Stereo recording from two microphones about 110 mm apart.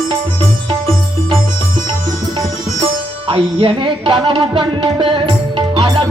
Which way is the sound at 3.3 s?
55° right (ahead or behind).